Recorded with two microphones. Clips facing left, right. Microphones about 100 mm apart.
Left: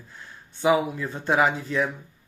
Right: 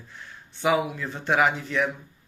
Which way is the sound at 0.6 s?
25° left (ahead or behind).